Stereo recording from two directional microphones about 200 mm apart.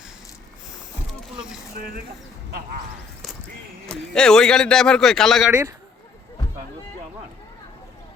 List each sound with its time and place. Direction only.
3.8 s a man's voice: 5° left (ahead or behind)
5.5 s speech: 15° right (ahead or behind)